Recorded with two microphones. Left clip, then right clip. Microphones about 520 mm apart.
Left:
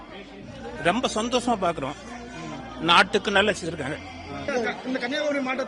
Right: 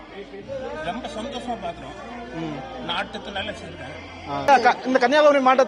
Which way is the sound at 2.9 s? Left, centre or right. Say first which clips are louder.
Left 10 dB; centre.